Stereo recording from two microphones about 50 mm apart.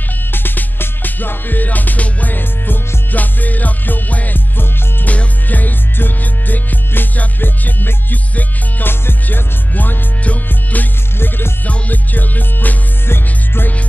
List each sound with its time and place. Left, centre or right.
0.3 s music: left
11.1 s music: left
11.6 s music: left